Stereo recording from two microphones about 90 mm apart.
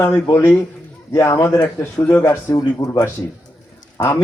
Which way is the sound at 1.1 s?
35° left (ahead or behind).